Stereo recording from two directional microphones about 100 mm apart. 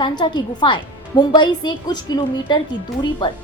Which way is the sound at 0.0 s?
50° left (ahead or behind).